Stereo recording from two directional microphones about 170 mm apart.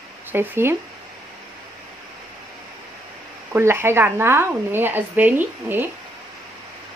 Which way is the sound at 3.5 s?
15° right (ahead or behind).